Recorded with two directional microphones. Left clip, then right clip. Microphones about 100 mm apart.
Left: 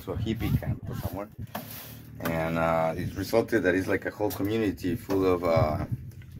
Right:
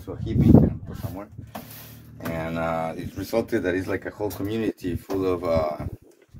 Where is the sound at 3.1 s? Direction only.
50° right (ahead or behind).